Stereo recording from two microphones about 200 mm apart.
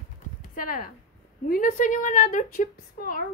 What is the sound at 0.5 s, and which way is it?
A woman's voice, 45° left (ahead or behind).